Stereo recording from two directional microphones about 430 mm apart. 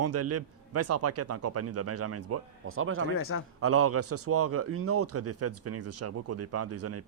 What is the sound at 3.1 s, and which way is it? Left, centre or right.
Speech, left.